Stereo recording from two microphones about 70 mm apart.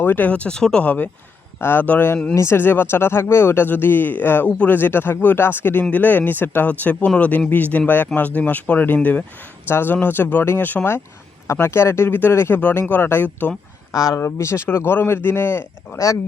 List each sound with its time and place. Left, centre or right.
0.0 s speech: left
2.3 s speech: left; by 4.8 s centre
4.8 s speech: left
9.6 s speech: left
13.9 s speech: centre
14.2 s speech: left